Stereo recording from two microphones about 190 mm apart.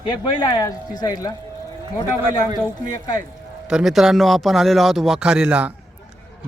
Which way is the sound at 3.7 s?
5° right (ahead or behind).